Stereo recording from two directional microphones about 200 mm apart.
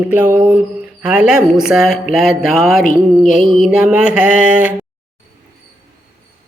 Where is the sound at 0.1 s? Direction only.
10° right (ahead or behind).